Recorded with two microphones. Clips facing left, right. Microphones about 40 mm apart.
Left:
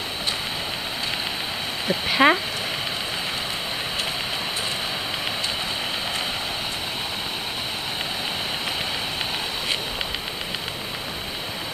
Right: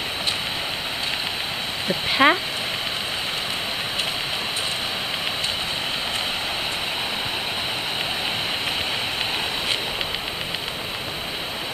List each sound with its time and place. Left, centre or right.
1.9 s speech: centre